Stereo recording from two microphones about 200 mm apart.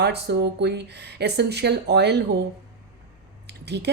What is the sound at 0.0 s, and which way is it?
A woman's voice, 55° right (ahead or behind).